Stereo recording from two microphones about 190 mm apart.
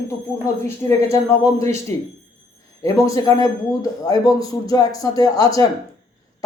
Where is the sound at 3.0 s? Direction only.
15° left (ahead or behind).